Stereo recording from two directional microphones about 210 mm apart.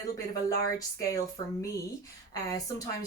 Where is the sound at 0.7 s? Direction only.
15° left (ahead or behind).